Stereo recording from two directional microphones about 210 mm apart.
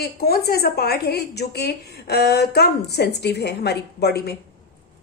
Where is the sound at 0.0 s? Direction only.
50° left (ahead or behind).